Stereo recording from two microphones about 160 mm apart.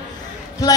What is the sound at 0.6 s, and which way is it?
Speech, 20° left (ahead or behind).